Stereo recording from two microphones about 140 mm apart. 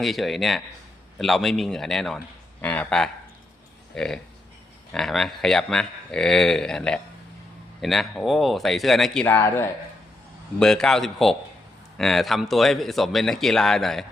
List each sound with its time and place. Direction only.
0.0 s speech: centre (ahead or behind)
9.2 s a man's voice: 15° left (ahead or behind)
10.6 s speech: 5° left (ahead or behind)